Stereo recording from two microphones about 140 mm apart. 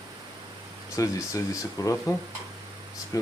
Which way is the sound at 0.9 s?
25° left (ahead or behind).